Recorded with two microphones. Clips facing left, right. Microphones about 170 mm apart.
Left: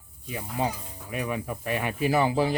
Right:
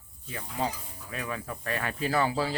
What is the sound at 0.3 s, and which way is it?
Speech, 15° left (ahead or behind).